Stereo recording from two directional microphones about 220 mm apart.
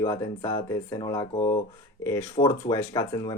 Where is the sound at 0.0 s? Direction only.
15° left (ahead or behind).